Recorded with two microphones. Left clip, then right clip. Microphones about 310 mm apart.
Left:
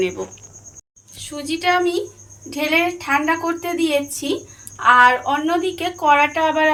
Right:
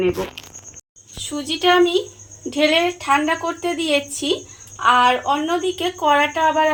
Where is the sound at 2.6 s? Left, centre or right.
Right.